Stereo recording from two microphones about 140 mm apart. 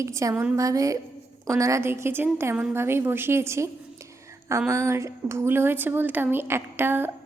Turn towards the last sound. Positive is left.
turn(degrees=-15)  # may be behind; listen again after turning